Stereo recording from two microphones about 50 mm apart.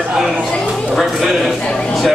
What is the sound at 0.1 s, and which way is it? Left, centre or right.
Speech, centre.